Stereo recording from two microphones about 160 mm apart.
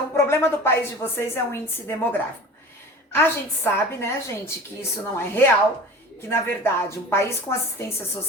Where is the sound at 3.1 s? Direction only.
15° left (ahead or behind).